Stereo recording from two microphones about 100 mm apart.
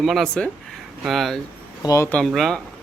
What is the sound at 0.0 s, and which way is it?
Speech, centre (ahead or behind).